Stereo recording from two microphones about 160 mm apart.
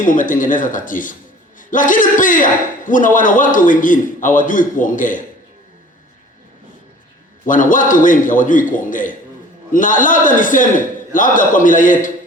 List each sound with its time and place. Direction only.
0.0 s a man's voice: 55° left (ahead or behind)
7.4 s a man's voice: 55° left (ahead or behind)